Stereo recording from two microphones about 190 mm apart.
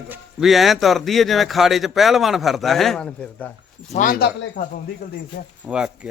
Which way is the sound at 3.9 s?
45° left (ahead or behind).